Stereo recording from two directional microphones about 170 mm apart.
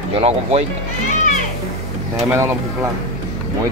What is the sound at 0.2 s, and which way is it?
Speech, 40° right (ahead or behind).